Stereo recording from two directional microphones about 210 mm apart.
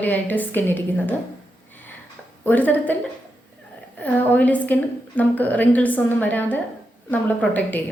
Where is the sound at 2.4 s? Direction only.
10° left (ahead or behind).